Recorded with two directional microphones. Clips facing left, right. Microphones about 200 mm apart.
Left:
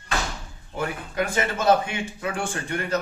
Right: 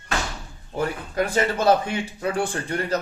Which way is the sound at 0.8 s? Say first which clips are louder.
Right 3 dB; 35° right (ahead or behind).